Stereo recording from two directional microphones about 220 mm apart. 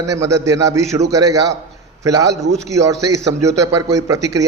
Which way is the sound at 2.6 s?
15° right (ahead or behind).